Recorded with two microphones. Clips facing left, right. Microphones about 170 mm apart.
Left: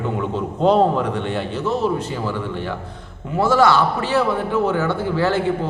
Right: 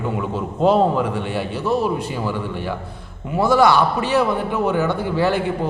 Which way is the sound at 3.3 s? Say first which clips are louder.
Right 1 dB; 15° right (ahead or behind).